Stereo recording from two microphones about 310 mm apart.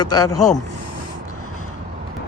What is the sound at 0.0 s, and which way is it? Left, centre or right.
Speech, left.